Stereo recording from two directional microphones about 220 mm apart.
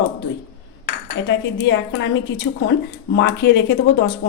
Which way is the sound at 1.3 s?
55° left (ahead or behind).